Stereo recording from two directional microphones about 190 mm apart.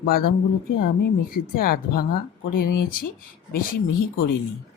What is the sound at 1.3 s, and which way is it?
Speech, 50° left (ahead or behind).